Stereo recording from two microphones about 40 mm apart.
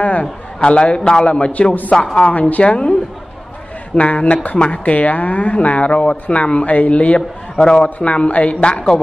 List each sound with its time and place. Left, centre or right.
0.0 s a man's voice: left
1.5 s speech: left
2.1 s a man's voice: left